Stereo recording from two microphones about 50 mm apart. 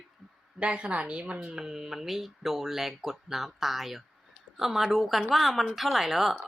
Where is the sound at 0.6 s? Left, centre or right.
Right.